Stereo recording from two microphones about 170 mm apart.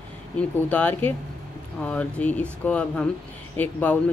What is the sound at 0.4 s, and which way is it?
Speech, 10° left (ahead or behind).